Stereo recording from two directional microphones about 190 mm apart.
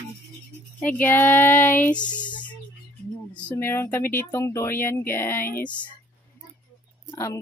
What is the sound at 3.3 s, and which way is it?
Speech, 10° left (ahead or behind).